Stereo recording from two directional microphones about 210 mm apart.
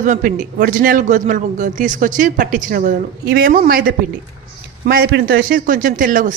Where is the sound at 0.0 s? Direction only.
40° right (ahead or behind).